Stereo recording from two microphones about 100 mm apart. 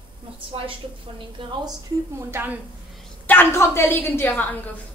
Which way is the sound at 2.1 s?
20° right (ahead or behind).